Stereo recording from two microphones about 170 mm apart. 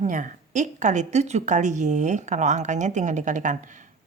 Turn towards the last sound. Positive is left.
turn(degrees=-45)  # may be behind; listen again after turning